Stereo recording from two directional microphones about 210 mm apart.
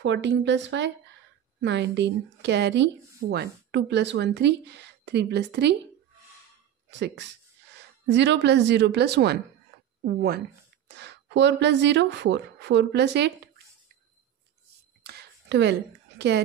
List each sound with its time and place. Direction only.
0.0 s a woman's voice: 60° right (ahead or behind)
6.9 s a woman's voice: 55° right (ahead or behind)
15.0 s a sound: 55° right (ahead or behind)
16.2 s a woman's voice: 55° right (ahead or behind)